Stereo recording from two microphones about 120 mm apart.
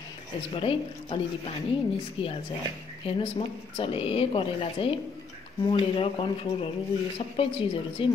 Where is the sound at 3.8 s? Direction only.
50° left (ahead or behind).